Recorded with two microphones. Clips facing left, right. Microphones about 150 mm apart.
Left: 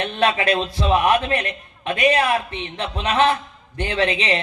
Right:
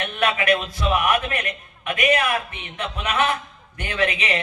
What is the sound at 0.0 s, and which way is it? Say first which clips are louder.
A man's voice: left 3 dB; 30° left (ahead or behind).